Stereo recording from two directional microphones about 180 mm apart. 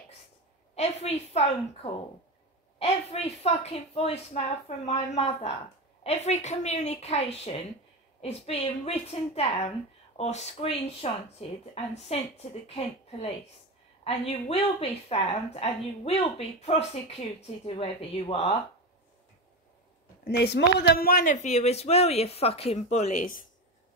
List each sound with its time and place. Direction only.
0.7 s a woman's voice: 35° left (ahead or behind)
20.2 s a woman's voice: 65° left (ahead or behind); by 23.4 s 45° left (ahead or behind)